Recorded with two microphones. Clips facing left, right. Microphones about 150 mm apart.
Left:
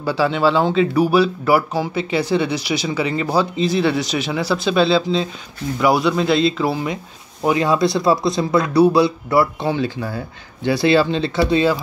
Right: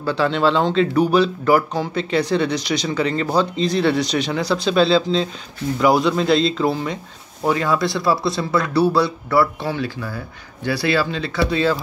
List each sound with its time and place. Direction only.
0.0 s speech: 5° left (ahead or behind)
7.4 s speech: 20° left (ahead or behind)